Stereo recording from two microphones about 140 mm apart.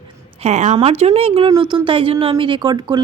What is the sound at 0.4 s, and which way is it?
Speech, 55° right (ahead or behind).